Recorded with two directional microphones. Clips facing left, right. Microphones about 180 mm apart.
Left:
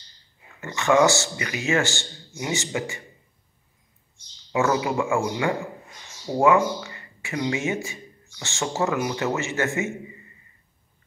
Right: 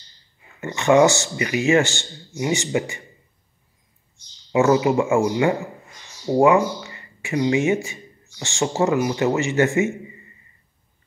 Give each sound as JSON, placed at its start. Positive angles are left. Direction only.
{"t": 0.6, "sound": "speech", "side_deg": -20}
{"t": 4.5, "sound": "speech", "side_deg": -20}